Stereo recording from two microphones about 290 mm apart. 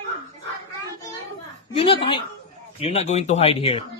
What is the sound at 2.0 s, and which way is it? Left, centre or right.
Speech, centre.